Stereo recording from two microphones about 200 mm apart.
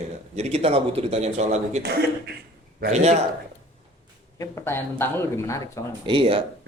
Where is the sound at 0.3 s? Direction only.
30° right (ahead or behind).